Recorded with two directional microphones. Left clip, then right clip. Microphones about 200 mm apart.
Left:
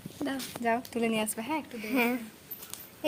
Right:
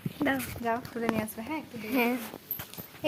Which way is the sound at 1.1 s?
30° left (ahead or behind).